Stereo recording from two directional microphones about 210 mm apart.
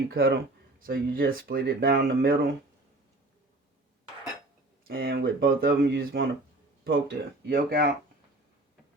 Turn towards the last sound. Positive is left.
turn(degrees=-45)  # may be behind; listen again after turning